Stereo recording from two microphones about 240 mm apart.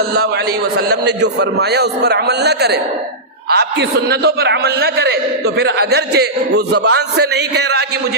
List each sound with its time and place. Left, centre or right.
0.9 s a man's voice: right